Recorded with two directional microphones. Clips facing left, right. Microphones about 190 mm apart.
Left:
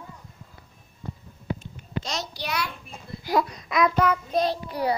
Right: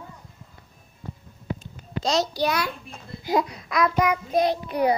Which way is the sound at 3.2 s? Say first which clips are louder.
Right 1 dB; 15° right (ahead or behind).